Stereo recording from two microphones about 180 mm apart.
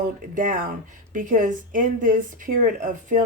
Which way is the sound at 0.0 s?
50° right (ahead or behind).